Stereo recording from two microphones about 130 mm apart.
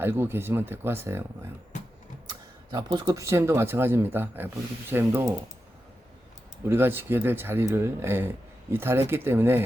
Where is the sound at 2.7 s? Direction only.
35° right (ahead or behind); by 5.3 s 15° right (ahead or behind).